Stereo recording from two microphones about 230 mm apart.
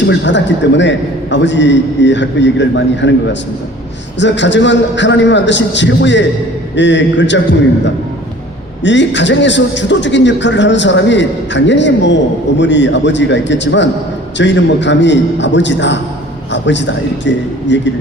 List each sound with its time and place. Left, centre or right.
0.0 s a man's voice: left
4.2 s a man's voice: left
8.8 s a man's voice: left